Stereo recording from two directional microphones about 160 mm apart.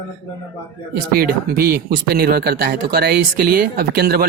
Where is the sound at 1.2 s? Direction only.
70° right (ahead or behind).